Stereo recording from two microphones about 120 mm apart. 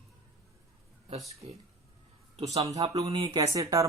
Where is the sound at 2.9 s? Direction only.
30° right (ahead or behind).